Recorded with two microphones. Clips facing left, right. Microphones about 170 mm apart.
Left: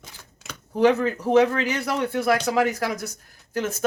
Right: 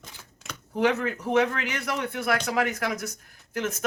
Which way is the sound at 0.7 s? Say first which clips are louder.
Left 5 dB; 35° left (ahead or behind).